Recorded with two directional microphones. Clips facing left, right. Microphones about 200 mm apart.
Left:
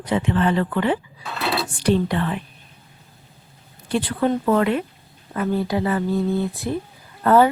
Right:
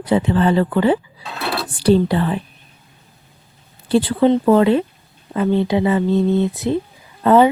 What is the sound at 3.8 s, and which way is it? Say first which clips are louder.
Speech: right 7 dB; 30° right (ahead or behind).